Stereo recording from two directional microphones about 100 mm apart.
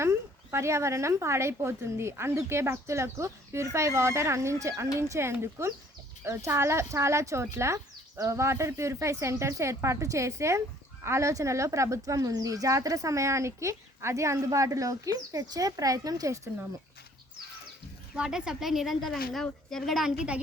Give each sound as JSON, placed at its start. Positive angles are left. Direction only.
{"t": 0.0, "sound": "speech", "side_deg": -25}
{"t": 18.2, "sound": "a woman's voice", "side_deg": -5}